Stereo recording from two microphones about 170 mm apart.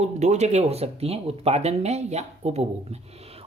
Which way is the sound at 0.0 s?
40° right (ahead or behind).